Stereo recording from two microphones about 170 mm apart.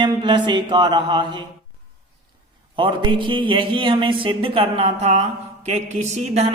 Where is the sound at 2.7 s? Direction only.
30° right (ahead or behind).